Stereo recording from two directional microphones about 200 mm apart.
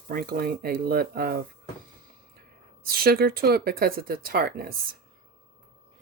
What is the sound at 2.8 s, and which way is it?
Speech, 50° right (ahead or behind).